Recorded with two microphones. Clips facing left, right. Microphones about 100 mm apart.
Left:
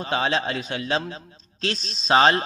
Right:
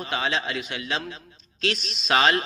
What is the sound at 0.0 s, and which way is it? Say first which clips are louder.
A man's voice: left 3 dB; 35° left (ahead or behind).